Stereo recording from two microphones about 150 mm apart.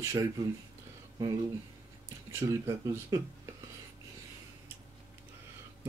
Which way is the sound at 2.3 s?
20° right (ahead or behind).